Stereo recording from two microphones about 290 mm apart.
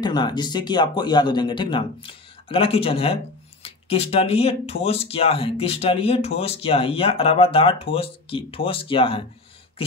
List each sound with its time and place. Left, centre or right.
0.0 s speech: centre